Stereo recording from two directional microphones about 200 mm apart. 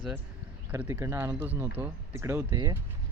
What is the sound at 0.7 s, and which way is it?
Speech, 15° right (ahead or behind).